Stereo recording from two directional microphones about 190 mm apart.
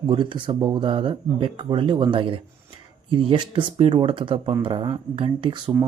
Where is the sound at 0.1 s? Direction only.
25° right (ahead or behind).